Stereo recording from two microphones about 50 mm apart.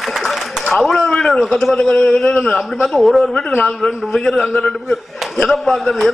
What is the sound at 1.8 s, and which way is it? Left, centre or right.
Speech, left.